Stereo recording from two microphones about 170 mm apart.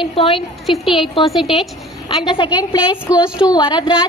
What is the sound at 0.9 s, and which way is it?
Speech, 30° left (ahead or behind).